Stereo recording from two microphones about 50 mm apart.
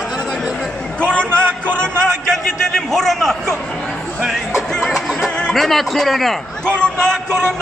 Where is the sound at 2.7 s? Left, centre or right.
Centre.